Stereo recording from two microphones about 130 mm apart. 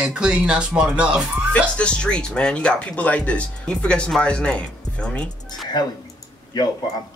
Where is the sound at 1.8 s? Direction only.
10° left (ahead or behind).